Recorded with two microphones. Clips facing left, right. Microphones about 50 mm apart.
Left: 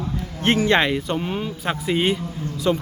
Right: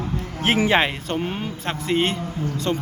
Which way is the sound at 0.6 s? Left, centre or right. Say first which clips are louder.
Left 1 dB; centre.